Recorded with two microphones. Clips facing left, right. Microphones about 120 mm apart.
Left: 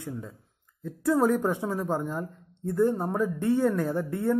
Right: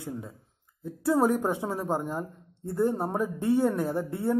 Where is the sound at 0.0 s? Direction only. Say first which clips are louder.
Even; 15° right (ahead or behind).